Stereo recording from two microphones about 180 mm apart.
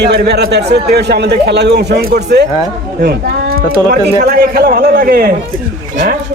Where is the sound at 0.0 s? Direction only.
65° right (ahead or behind).